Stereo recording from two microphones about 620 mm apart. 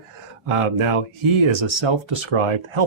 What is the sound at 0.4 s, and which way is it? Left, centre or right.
Speech, right.